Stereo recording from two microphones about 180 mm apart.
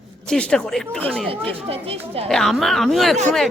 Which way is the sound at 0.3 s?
5° left (ahead or behind).